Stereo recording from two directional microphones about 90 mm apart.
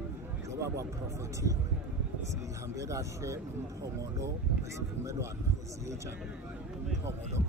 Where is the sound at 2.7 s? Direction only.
35° right (ahead or behind).